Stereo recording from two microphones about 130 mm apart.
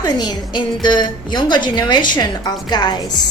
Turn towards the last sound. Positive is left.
turn(degrees=30)  # may be behind; listen again after turning